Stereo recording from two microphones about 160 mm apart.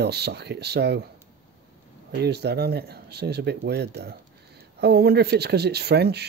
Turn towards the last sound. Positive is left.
turn(degrees=-90)